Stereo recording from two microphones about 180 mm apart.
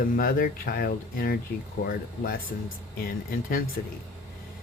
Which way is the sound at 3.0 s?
50° left (ahead or behind).